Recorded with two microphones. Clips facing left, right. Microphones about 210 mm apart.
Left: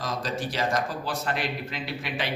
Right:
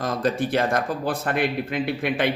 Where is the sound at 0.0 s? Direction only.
55° right (ahead or behind).